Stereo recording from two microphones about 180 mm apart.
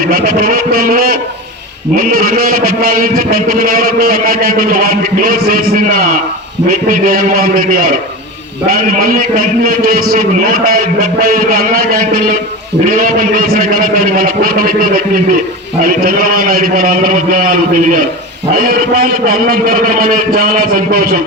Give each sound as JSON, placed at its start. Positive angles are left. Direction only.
{"t": 0.1, "sound": "a man's voice", "side_deg": -50}